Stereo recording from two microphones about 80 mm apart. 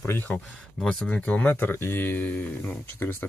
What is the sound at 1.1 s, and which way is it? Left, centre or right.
Speech, centre.